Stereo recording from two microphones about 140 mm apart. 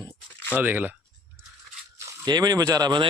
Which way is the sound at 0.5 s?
10° right (ahead or behind).